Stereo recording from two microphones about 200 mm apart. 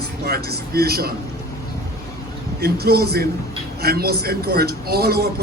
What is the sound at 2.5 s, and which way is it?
A man's voice, 50° right (ahead or behind).